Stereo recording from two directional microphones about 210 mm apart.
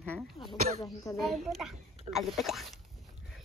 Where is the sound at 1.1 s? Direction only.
Centre (ahead or behind).